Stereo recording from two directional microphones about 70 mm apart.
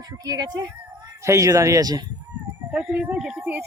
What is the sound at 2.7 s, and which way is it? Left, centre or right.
Speech, centre.